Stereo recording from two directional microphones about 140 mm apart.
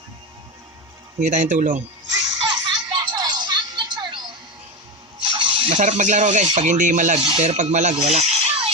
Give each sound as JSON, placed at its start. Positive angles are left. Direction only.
{"t": 1.2, "sound": "speech", "side_deg": -60}
{"t": 2.4, "sound": "music", "side_deg": -30}
{"t": 5.2, "sound": "a sound", "side_deg": -40}
{"t": 5.6, "sound": "speech", "side_deg": -60}